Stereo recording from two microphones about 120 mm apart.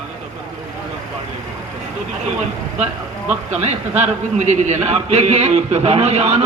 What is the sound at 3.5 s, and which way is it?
A man's voice, 70° right (ahead or behind).